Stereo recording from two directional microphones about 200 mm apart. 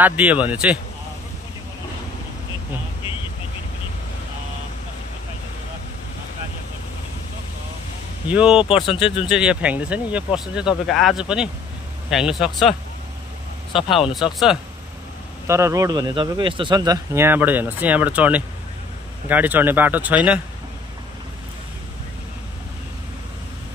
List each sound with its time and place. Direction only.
0.0 s a man's voice: 10° right (ahead or behind)
8.3 s speech: 5° right (ahead or behind)
8.8 s speech: 25° left (ahead or behind)
9.3 s speech: 5° right (ahead or behind)
13.7 s speech: centre (ahead or behind)
15.4 s a man's voice: 15° right (ahead or behind)